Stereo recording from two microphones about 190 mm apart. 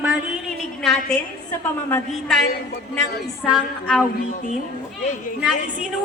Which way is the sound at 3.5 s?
Centre (ahead or behind).